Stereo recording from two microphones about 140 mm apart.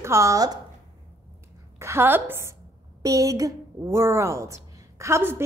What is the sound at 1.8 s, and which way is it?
A woman's voice, 20° right (ahead or behind).